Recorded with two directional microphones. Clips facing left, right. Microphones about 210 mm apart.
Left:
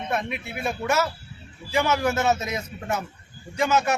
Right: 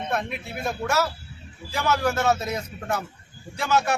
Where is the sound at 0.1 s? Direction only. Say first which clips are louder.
Left 2 dB; 5° left (ahead or behind).